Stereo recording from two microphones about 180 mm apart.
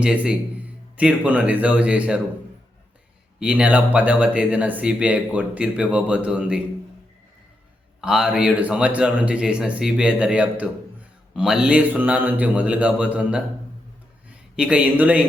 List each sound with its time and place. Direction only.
0.0 s speech: 5° right (ahead or behind)
3.4 s speech: 5° right (ahead or behind)
8.0 s speech: 5° right (ahead or behind)